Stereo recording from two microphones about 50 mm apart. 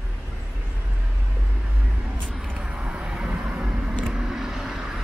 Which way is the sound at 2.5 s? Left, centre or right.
Centre.